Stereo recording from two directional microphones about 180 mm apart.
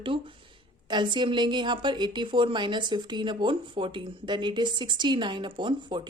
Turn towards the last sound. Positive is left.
turn(degrees=-25)  # may be behind; listen again after turning